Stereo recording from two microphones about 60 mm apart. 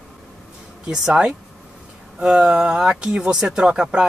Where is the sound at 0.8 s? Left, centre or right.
Centre.